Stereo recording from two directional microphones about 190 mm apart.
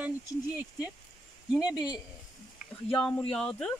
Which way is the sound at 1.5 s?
5° right (ahead or behind).